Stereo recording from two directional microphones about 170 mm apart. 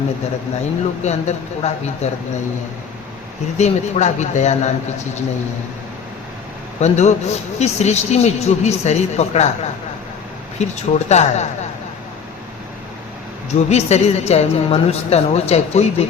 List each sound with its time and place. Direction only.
0.6 s a man's voice: 40° left (ahead or behind)
3.6 s speech: 45° left (ahead or behind)
6.7 s a man's voice: 40° left (ahead or behind)
10.6 s a man's voice: 40° left (ahead or behind)
13.7 s a man's voice: 40° left (ahead or behind)